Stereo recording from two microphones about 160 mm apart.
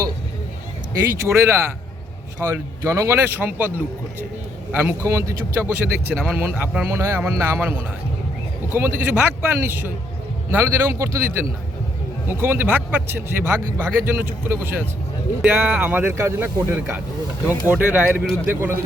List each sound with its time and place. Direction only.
1.1 s speech: 15° right (ahead or behind)
9.0 s speech: 15° right (ahead or behind)